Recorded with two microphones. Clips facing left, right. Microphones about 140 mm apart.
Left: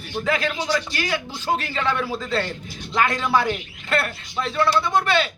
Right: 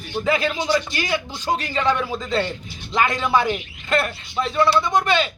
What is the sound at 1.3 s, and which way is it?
Speech, 10° left (ahead or behind).